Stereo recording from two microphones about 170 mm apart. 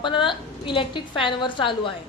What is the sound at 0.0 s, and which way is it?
A woman's voice, 30° left (ahead or behind).